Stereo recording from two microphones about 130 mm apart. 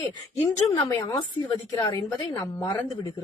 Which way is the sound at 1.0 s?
35° left (ahead or behind).